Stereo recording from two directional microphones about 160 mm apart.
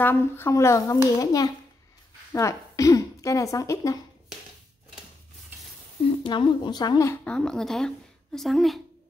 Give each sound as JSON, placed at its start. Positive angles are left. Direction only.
{"t": 0.0, "sound": "a child's voice", "side_deg": 15}
{"t": 6.2, "sound": "speech", "side_deg": 30}
{"t": 7.2, "sound": "a woman's voice", "side_deg": 5}